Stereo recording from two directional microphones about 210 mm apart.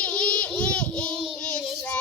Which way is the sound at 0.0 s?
5° left (ahead or behind).